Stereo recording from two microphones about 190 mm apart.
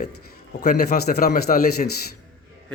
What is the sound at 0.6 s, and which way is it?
Speech, 55° left (ahead or behind).